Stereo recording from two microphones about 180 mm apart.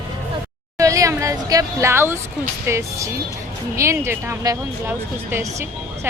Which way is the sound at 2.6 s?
15° right (ahead or behind).